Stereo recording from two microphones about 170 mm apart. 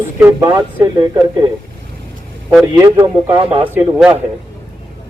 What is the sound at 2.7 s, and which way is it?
Speech, 20° right (ahead or behind).